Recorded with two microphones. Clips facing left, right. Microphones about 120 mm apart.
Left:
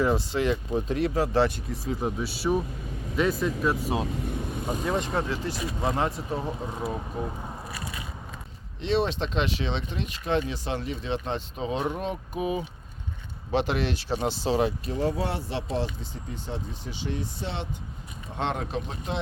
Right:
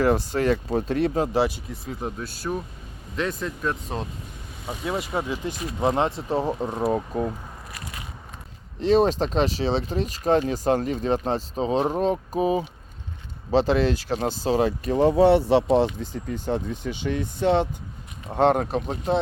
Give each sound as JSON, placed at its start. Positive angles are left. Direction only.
{"t": 0.0, "sound": "speech", "side_deg": -50}
{"t": 1.0, "sound": "speech", "side_deg": -25}
{"t": 1.3, "sound": "speech", "side_deg": -10}
{"t": 8.8, "sound": "speech", "side_deg": -40}
{"t": 14.9, "sound": "speech", "side_deg": -65}
{"t": 16.3, "sound": "speech", "side_deg": -55}